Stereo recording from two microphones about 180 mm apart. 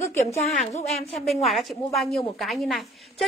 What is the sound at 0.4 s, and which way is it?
Speech, 40° left (ahead or behind).